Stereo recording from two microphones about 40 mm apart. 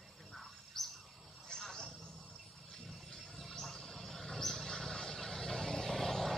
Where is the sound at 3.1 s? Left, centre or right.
Centre.